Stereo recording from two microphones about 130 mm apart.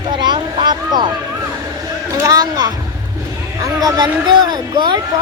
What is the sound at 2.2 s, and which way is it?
A child's voice, 30° right (ahead or behind).